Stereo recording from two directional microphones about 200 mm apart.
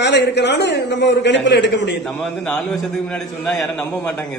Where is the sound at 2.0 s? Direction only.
5° left (ahead or behind).